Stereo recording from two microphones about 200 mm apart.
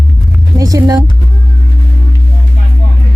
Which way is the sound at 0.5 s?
15° right (ahead or behind).